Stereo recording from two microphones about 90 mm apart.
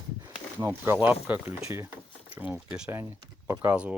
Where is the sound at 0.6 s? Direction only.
30° right (ahead or behind).